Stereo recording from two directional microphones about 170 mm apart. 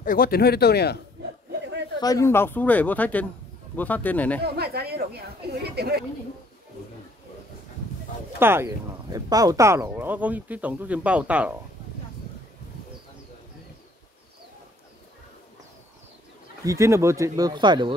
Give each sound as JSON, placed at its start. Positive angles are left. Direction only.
{"t": 0.0, "sound": "speech", "side_deg": 55}
{"t": 2.0, "sound": "speech", "side_deg": 20}
{"t": 4.6, "sound": "a woman's voice", "side_deg": -70}
{"t": 8.4, "sound": "speech", "side_deg": -15}
{"t": 16.6, "sound": "speech", "side_deg": -15}